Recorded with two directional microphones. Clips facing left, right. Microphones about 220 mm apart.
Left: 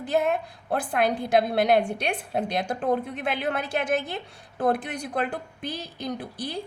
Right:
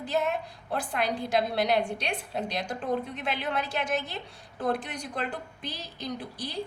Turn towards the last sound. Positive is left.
turn(degrees=55)  # may be behind; listen again after turning